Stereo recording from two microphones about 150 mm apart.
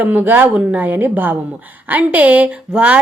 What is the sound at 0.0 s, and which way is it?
A woman's voice, 10° right (ahead or behind).